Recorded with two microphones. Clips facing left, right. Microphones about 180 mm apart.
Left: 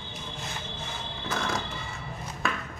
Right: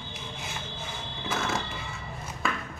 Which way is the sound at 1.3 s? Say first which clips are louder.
Even; 5° right (ahead or behind).